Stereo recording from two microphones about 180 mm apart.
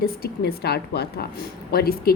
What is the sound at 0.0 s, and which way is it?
A woman's voice, 60° left (ahead or behind).